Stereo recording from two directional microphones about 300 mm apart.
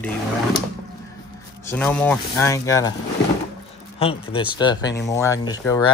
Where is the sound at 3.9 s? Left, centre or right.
Centre.